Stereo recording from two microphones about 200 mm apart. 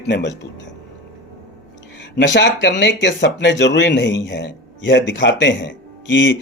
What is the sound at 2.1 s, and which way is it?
Speech, 60° left (ahead or behind).